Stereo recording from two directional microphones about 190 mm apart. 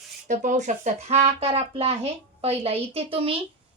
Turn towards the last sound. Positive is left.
turn(degrees=-30)  # may be behind; listen again after turning